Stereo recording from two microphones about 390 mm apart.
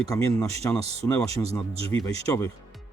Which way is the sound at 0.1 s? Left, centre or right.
Centre.